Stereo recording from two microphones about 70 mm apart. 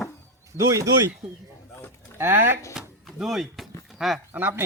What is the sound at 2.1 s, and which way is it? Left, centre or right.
Speech, right.